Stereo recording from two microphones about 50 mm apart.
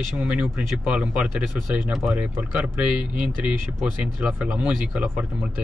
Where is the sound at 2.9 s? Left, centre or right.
Right.